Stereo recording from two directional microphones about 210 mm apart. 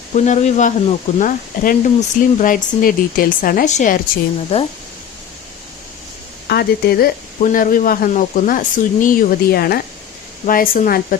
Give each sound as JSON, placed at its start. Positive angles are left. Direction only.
{"t": 0.1, "sound": "speech", "side_deg": 35}
{"t": 4.5, "sound": "speech", "side_deg": 30}
{"t": 6.5, "sound": "speech", "side_deg": 50}